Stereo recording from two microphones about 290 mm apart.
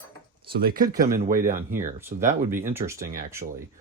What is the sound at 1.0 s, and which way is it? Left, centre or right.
Speech, centre.